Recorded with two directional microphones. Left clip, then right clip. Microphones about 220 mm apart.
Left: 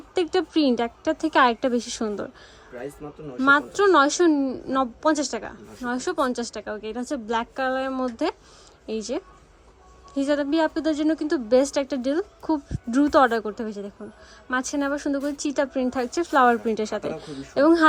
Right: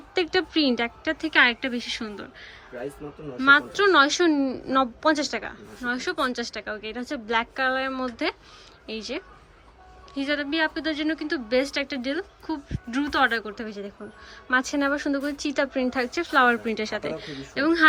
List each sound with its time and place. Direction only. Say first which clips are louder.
0.1 s a woman's voice: left 1 dB; 15° left (ahead or behind)
3.0 s speech: even; centre (ahead or behind)
3.4 s a woman's voice: even; 15° left (ahead or behind)